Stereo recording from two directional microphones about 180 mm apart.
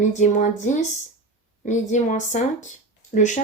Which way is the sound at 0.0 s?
45° left (ahead or behind).